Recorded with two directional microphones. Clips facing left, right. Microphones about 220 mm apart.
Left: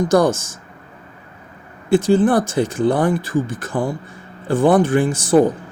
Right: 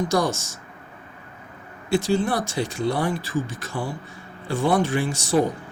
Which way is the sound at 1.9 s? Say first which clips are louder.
Left 8 dB; 50° left (ahead or behind).